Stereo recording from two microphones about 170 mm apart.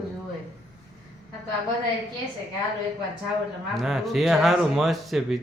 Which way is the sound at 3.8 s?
Centre (ahead or behind).